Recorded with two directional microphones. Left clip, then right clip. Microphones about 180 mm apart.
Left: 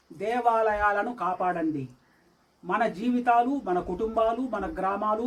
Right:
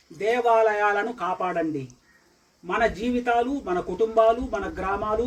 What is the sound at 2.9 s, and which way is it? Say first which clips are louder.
A man's voice: even; 20° left (ahead or behind).